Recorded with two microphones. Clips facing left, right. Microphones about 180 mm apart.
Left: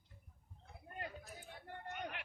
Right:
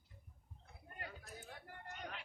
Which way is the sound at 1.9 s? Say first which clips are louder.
Left 3 dB; 65° left (ahead or behind).